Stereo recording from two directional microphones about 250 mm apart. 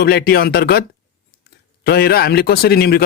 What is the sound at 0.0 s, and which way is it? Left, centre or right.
Speech, left.